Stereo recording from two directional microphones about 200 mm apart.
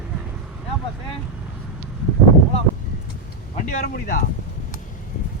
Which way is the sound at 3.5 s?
45° left (ahead or behind).